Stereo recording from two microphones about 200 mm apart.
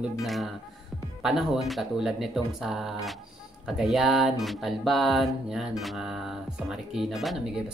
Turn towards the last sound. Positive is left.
turn(degrees=0)  # may be behind; listen again after turning